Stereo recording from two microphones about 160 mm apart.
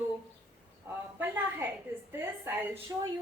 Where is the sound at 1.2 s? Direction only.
15° right (ahead or behind).